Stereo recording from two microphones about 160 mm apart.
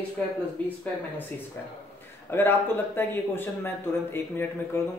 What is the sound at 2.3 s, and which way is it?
Speech, 15° left (ahead or behind).